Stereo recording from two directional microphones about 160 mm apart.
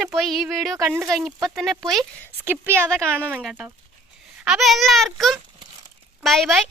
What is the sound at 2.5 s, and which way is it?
Speech, 15° right (ahead or behind).